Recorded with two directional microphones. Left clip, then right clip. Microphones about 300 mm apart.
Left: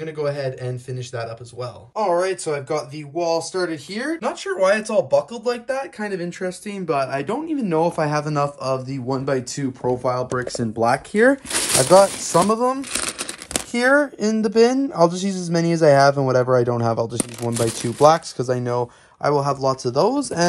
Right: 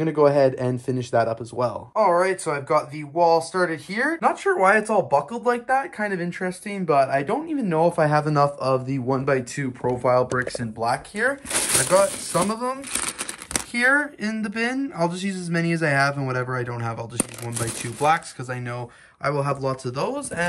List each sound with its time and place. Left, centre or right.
0.0 s speech: centre
2.0 s speech: centre
10.6 s speech: left
11.5 s speech: centre
12.9 s speech: centre
17.2 s speech: centre
18.4 s speech: centre